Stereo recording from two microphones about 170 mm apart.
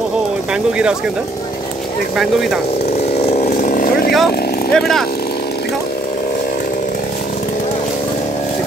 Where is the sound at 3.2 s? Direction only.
40° left (ahead or behind); by 4.1 s 60° left (ahead or behind).